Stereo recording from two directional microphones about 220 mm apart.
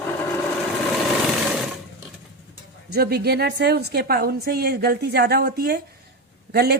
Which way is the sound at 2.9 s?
45° right (ahead or behind).